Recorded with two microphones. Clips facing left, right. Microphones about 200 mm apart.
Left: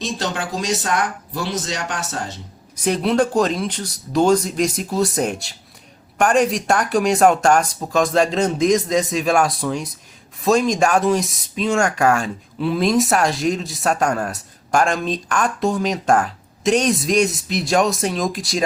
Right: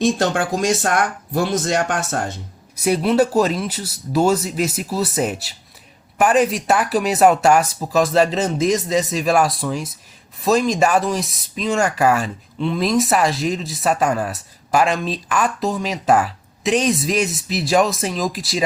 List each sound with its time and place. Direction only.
0.0 s speech: 50° right (ahead or behind)
2.7 s speech: 10° right (ahead or behind)